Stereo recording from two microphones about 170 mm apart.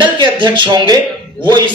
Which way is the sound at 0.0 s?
30° right (ahead or behind).